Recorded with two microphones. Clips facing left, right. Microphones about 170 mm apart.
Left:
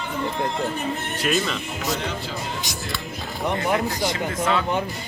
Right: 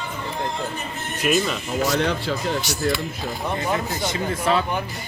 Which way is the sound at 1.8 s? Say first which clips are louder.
Right 5 dB; 75° right (ahead or behind).